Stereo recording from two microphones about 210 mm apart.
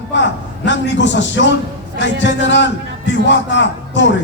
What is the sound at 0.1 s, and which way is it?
A man's voice, 60° left (ahead or behind).